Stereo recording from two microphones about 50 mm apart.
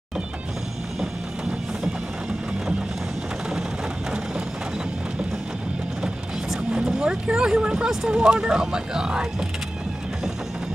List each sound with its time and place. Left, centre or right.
6.8 s vehicle: centre
7.2 s speech: centre